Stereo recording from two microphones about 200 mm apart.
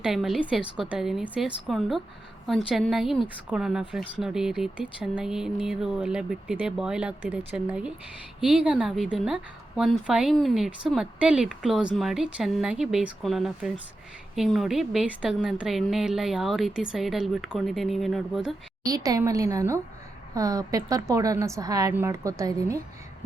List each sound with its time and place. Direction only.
0.0 s a woman's voice: centre (ahead or behind)
18.9 s a woman's voice: 15° right (ahead or behind)